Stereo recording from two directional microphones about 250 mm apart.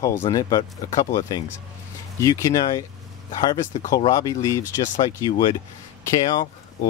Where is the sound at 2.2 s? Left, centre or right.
Centre.